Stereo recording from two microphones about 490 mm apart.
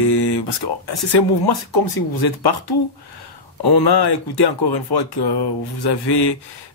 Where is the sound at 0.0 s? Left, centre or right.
Left.